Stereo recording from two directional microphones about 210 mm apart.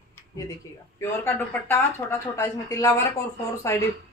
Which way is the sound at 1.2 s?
10° left (ahead or behind).